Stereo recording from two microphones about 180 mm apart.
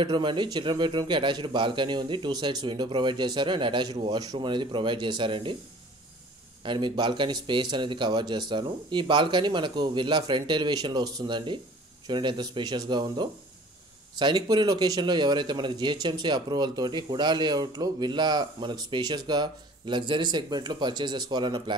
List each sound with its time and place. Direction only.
0.0 s a man's voice: 25° right (ahead or behind)
6.6 s a man's voice: 25° right (ahead or behind)